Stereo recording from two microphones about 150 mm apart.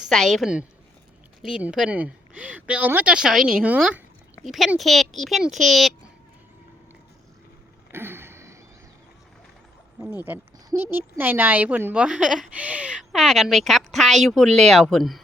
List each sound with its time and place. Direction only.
0.1 s a woman's voice: centre (ahead or behind)
7.9 s a sound: 15° right (ahead or behind)
10.1 s a woman's voice: 10° right (ahead or behind)